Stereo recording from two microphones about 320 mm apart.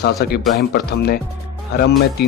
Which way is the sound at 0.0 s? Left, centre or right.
Left.